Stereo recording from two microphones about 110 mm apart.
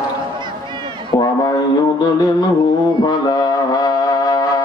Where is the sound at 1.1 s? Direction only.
35° left (ahead or behind).